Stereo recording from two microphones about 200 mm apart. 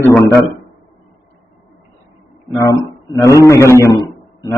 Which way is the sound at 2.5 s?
15° left (ahead or behind).